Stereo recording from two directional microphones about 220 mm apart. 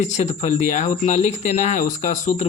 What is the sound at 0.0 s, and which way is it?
Speech, 30° left (ahead or behind).